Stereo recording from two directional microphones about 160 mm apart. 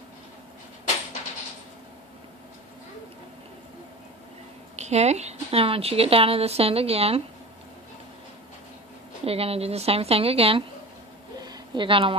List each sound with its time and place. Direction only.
4.8 s a woman's voice: 45° right (ahead or behind)
9.2 s a woman's voice: 40° right (ahead or behind)
11.3 s a sound: 25° right (ahead or behind)